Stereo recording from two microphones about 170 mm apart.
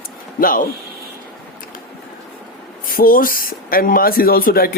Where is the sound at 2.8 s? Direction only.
55° left (ahead or behind).